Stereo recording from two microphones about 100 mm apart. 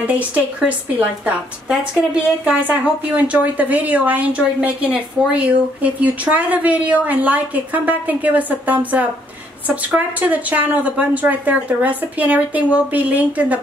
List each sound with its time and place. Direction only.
0.0 s a woman's voice: 15° right (ahead or behind)